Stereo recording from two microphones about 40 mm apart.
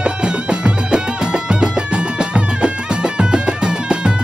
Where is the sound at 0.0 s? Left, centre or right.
Right.